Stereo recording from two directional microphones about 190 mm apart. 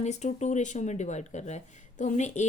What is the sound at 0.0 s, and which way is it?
Speech, 35° left (ahead or behind).